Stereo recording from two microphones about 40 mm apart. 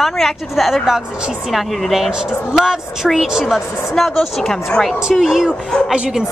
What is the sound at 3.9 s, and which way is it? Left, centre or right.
A woman's voice, centre.